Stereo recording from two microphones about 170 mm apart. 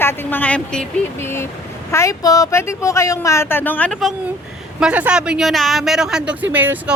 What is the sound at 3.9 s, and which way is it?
Speech, centre (ahead or behind).